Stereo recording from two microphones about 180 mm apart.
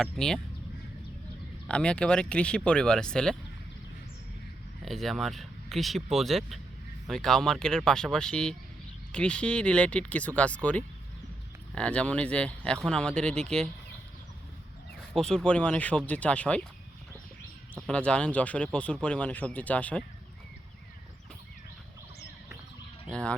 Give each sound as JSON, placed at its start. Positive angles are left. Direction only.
{"t": 0.0, "sound": "speech", "side_deg": 5}
{"t": 1.6, "sound": "speech", "side_deg": 5}
{"t": 4.9, "sound": "speech", "side_deg": 0}
{"t": 15.1, "sound": "speech", "side_deg": 5}
{"t": 17.7, "sound": "speech", "side_deg": 5}